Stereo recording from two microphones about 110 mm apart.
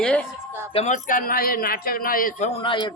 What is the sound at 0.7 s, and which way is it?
Speech, 90° left.